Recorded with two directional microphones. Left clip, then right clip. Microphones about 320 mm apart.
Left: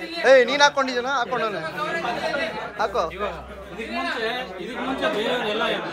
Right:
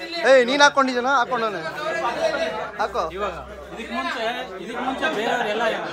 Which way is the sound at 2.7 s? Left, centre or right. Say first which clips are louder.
Left 3 dB; centre.